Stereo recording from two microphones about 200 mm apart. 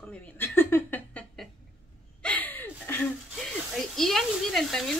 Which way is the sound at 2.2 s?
5° left (ahead or behind).